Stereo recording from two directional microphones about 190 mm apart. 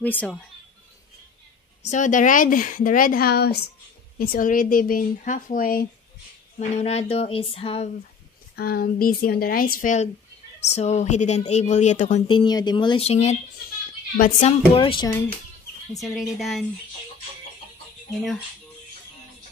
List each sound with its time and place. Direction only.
0.0 s speech: 10° left (ahead or behind)
1.9 s speech: 40° left (ahead or behind)
6.8 s a woman's voice: 35° left (ahead or behind)
8.5 s a woman's voice: 55° left (ahead or behind)
12.3 s speech: 25° left (ahead or behind)
14.1 s speech: 50° left (ahead or behind)
14.8 s speech: 25° left (ahead or behind)
16.0 s speech: centre (ahead or behind)
18.1 s speech: centre (ahead or behind)